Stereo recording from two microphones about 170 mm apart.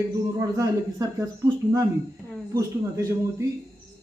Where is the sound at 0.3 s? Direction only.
20° right (ahead or behind).